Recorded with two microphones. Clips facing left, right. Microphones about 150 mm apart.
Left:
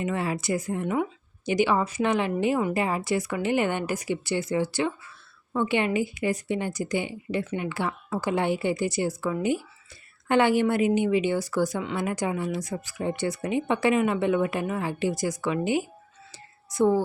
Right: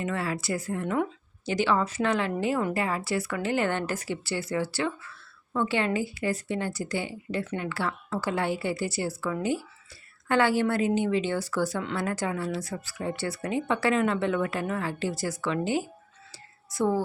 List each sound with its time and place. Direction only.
0.0 s speech: 20° left (ahead or behind)
16.3 s whispering: 20° left (ahead or behind)